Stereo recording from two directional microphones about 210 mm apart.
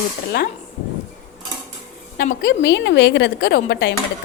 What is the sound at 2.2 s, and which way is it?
A woman's voice, 40° left (ahead or behind).